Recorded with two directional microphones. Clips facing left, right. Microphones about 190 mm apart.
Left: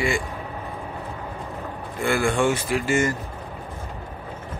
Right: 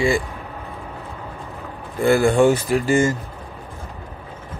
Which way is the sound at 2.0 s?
40° right (ahead or behind).